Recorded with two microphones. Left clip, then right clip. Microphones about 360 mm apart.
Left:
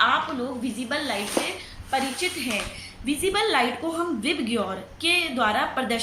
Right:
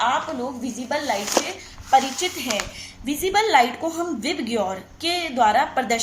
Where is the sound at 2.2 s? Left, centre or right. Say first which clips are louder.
Right 2 dB; right.